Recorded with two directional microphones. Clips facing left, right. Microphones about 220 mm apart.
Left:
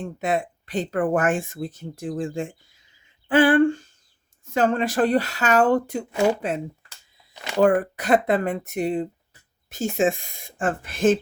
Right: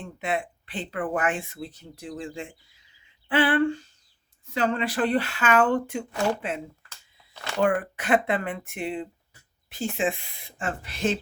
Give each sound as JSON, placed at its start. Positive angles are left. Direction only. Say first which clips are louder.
{"t": 0.0, "sound": "speech", "louder": "left 5 dB", "side_deg": 40}
{"t": 6.9, "sound": "a sound", "louder": "left 1 dB", "side_deg": 15}
{"t": 7.6, "sound": "speech", "louder": "left 5 dB", "side_deg": 40}